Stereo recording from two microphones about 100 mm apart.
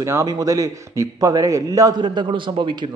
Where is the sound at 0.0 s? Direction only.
30° right (ahead or behind).